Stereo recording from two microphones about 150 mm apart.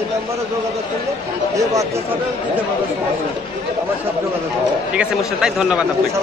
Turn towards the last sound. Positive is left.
turn(degrees=-5)  # may be behind; listen again after turning